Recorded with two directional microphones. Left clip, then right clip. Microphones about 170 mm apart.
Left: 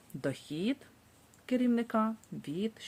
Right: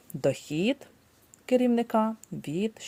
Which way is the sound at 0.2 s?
40° right (ahead or behind).